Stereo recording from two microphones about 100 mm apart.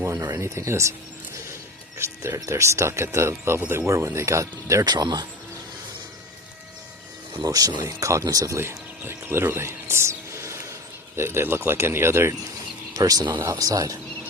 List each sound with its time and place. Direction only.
0.0 s speech: 30° right (ahead or behind)
2.0 s speech: 30° right (ahead or behind)
4.9 s speech: 45° right (ahead or behind)
7.4 s speech: 40° right (ahead or behind)
12.9 s speech: 35° right (ahead or behind)